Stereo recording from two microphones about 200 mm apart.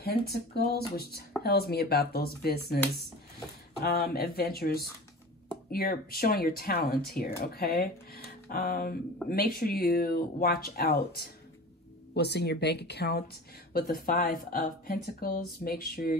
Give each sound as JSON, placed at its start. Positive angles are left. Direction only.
{"t": 0.0, "sound": "speech", "side_deg": 50}
{"t": 3.8, "sound": "speech", "side_deg": 50}